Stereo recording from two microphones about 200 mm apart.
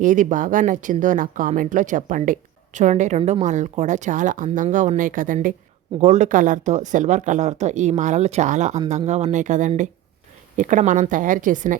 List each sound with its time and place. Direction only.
0.0 s speech: 40° right (ahead or behind)